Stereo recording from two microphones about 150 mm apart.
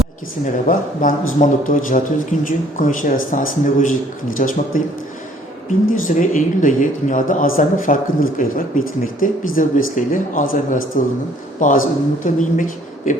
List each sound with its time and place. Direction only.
0.4 s speech: 60° left (ahead or behind)
5.9 s speech: 60° left (ahead or behind)